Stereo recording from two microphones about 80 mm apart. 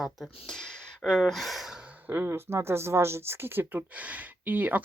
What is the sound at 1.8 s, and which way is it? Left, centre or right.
Speech, centre.